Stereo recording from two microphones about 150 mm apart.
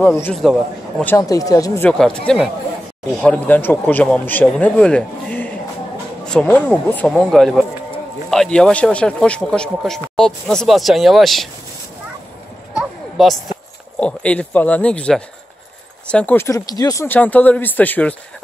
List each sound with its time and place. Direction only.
0.0 s speech: 15° left (ahead or behind)
0.4 s speech: centre (ahead or behind)
1.0 s speech: 20° left (ahead or behind)
1.9 s speech: 5° left (ahead or behind)
12.7 s a sound: centre (ahead or behind)
13.9 s speech: 5° left (ahead or behind)